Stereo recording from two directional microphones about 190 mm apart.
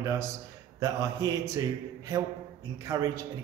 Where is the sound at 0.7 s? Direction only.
15° right (ahead or behind).